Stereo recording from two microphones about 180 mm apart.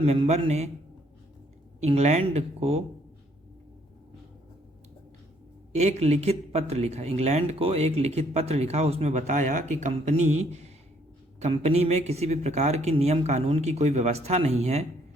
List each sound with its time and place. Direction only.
0.0 s speech: 35° right (ahead or behind)
1.8 s speech: 40° right (ahead or behind)
5.7 s speech: 35° right (ahead or behind)